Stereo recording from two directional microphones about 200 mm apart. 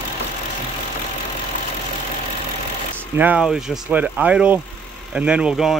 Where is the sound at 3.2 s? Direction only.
5° right (ahead or behind).